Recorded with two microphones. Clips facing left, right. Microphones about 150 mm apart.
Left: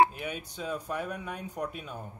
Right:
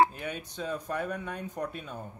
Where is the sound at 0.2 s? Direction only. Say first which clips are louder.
Right 1 dB; 10° left (ahead or behind).